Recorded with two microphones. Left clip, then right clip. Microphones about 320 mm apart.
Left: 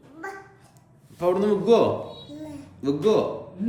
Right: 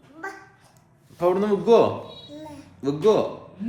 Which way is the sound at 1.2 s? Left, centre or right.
Centre.